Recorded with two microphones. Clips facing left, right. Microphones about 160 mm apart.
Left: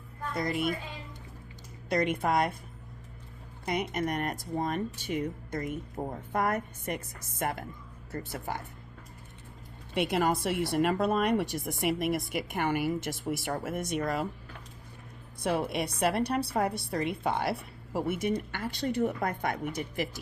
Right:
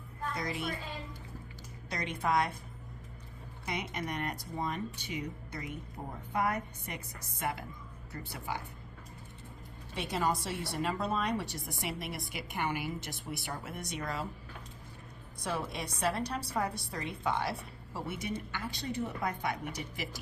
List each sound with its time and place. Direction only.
0.3 s speech: 55° left (ahead or behind)
1.9 s speech: 55° left (ahead or behind)
3.7 s speech: 50° left (ahead or behind)
9.9 s speech: 65° left (ahead or behind)
15.4 s speech: 65° left (ahead or behind)